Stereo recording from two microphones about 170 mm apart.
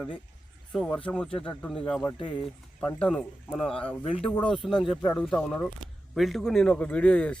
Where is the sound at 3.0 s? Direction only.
5° left (ahead or behind).